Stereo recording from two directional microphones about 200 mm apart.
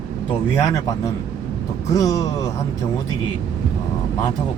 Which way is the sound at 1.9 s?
15° left (ahead or behind).